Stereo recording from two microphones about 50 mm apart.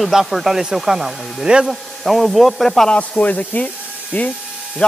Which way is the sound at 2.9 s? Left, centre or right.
Left.